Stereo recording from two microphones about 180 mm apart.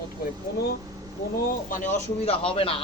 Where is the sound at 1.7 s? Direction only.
45° left (ahead or behind).